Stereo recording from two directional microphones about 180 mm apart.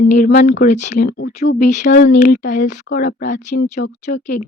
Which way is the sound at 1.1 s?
65° left (ahead or behind).